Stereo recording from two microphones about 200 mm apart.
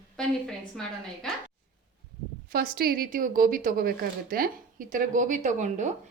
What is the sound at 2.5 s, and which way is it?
A woman's voice, 45° right (ahead or behind).